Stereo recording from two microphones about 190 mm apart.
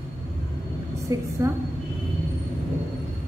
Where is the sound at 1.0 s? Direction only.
15° right (ahead or behind).